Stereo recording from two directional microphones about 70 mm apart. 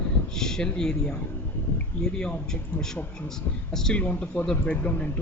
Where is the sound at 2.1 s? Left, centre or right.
Centre.